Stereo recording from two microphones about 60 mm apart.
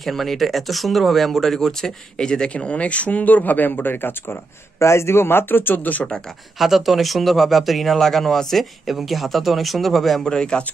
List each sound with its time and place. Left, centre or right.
0.0 s speech: centre; by 4.4 s left
4.7 s speech: left
6.6 s speech: centre